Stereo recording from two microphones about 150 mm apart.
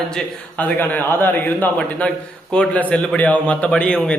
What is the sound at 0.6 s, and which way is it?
A man's voice, 10° left (ahead or behind).